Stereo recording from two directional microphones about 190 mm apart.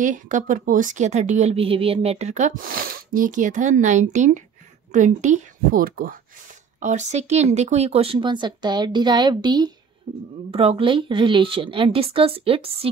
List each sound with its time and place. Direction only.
0.0 s a woman's voice: 40° right (ahead or behind)